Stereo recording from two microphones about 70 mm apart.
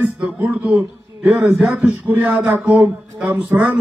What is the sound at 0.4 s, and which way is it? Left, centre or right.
A man's voice, right.